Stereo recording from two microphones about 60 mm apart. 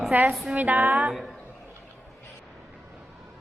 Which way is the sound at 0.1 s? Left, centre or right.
Right.